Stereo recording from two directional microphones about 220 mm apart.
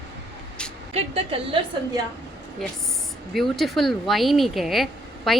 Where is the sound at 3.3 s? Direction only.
Centre (ahead or behind).